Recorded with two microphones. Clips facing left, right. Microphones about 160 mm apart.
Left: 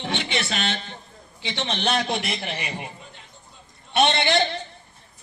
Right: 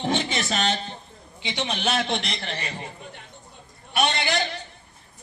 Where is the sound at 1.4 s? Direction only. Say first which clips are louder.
Left 1 dB; 15° right (ahead or behind); by 2.9 s 15° left (ahead or behind).